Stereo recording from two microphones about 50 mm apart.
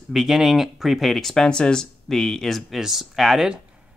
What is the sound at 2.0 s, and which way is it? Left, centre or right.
Speech, centre.